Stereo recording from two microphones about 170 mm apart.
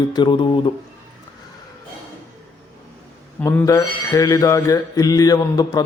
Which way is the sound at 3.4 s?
15° left (ahead or behind).